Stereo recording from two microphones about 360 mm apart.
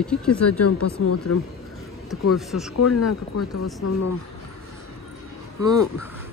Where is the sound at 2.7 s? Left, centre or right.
Left.